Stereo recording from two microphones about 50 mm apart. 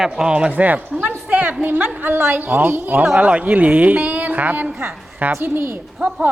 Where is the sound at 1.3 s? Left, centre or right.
Right.